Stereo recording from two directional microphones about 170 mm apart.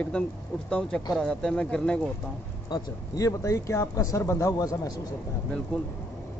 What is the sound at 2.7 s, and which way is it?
Speech, 20° left (ahead or behind).